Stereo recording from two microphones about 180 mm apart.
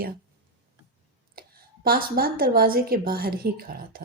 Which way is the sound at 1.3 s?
55° right (ahead or behind).